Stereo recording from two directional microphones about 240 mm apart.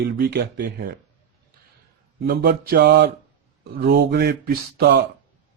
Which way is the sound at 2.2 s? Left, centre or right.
Right.